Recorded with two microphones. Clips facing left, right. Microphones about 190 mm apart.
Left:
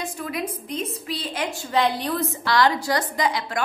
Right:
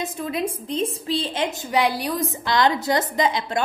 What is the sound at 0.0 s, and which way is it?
A woman's voice, 25° right (ahead or behind).